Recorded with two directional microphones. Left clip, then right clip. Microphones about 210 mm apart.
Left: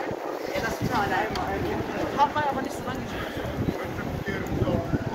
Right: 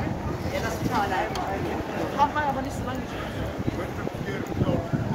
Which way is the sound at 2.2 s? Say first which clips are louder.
Even; 55° right (ahead or behind).